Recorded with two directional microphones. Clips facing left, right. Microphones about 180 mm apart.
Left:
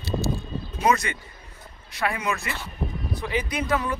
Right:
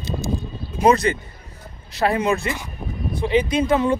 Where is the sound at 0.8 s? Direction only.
35° right (ahead or behind).